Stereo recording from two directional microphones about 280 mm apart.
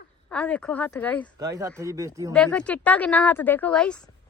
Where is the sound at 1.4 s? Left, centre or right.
Centre.